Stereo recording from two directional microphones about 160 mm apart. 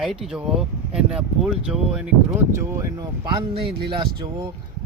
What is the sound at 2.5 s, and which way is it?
Speech, 20° right (ahead or behind).